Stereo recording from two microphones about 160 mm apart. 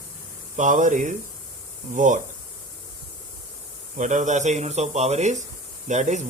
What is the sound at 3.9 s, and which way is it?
Speech, 50° right (ahead or behind).